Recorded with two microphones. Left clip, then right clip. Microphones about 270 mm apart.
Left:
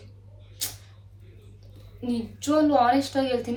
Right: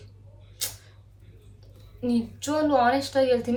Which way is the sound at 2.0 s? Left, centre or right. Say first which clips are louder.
Right 1 dB; centre.